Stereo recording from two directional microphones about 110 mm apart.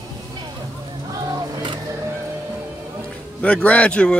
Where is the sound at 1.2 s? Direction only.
40° right (ahead or behind).